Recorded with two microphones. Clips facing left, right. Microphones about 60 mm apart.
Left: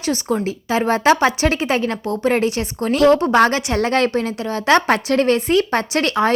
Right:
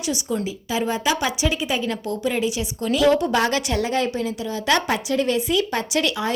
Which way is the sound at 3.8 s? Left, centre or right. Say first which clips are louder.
Left 5 dB; left.